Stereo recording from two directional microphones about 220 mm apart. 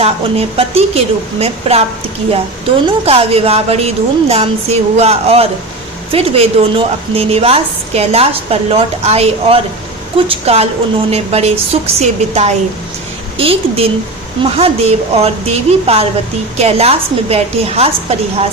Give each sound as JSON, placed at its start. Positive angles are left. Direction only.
{"t": 0.0, "sound": "a woman's voice", "side_deg": -25}
{"t": 2.8, "sound": "a woman's voice", "side_deg": -25}